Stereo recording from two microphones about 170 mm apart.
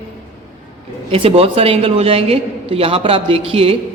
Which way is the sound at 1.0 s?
35° right (ahead or behind).